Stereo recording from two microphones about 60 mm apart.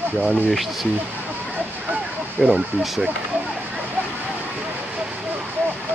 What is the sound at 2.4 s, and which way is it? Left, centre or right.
Speech, centre.